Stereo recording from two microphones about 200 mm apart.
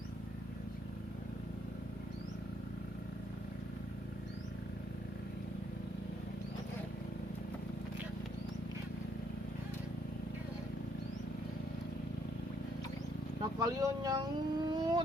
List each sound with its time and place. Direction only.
13.6 s speech: 20° right (ahead or behind)